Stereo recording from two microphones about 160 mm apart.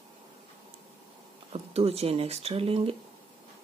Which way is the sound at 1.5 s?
40° right (ahead or behind).